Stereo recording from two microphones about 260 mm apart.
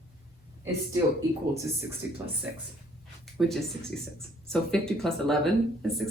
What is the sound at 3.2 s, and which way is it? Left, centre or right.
Speech, centre.